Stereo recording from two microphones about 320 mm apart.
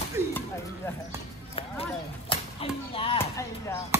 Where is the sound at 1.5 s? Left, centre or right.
Centre.